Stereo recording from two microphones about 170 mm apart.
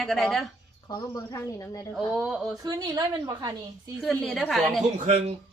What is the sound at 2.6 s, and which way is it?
Speech, 25° right (ahead or behind).